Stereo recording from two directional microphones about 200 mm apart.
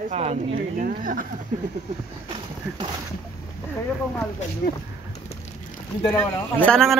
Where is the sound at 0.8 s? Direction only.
45° right (ahead or behind).